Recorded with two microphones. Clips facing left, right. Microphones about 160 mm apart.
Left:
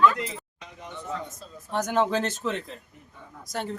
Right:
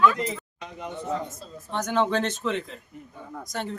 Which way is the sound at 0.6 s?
60° right (ahead or behind).